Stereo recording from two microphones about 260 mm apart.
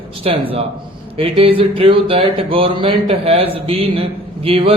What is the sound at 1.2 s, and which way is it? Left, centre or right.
Speech, right.